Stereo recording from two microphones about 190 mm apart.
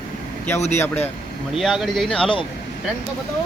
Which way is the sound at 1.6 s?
Centre (ahead or behind).